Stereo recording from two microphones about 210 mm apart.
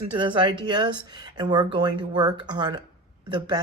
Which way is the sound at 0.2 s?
20° right (ahead or behind).